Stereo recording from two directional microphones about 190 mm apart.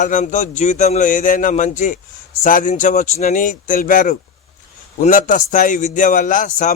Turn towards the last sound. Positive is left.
turn(degrees=40)  # may be behind; listen again after turning